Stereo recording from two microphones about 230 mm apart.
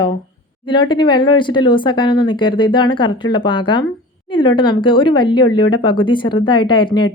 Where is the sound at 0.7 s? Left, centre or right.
Centre.